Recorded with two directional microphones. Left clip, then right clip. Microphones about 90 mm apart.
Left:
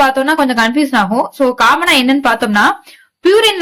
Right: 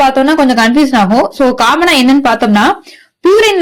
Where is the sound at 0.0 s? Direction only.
25° right (ahead or behind).